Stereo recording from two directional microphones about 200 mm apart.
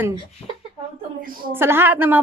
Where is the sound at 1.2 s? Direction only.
45° right (ahead or behind).